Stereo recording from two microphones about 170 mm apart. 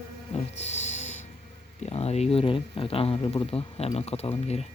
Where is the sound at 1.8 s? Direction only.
40° left (ahead or behind).